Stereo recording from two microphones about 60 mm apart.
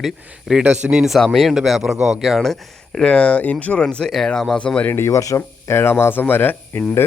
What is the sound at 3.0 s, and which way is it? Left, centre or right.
A man's voice, centre.